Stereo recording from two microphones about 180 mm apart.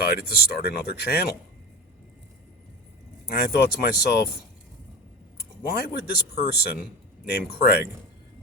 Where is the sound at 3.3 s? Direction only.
60° left (ahead or behind).